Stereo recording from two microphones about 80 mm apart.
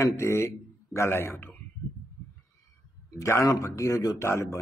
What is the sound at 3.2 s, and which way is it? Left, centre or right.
Mantra, left.